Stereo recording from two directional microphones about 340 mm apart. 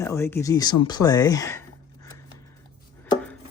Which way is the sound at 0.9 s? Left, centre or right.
Centre.